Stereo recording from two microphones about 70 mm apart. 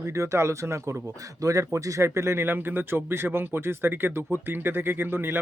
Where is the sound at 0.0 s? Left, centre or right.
Right.